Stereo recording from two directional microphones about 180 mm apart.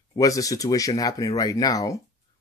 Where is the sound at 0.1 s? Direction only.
20° left (ahead or behind).